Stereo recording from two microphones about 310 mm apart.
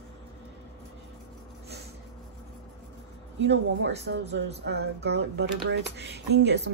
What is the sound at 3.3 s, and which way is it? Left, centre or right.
Speech, right.